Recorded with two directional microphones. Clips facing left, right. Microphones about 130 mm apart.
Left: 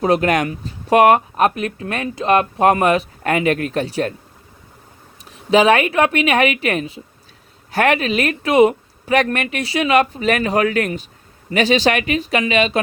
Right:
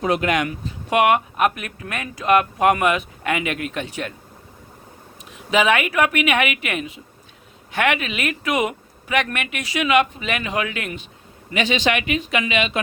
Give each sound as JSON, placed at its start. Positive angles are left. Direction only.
{"t": 0.0, "sound": "speech", "side_deg": 40}
{"t": 5.3, "sound": "speech", "side_deg": 35}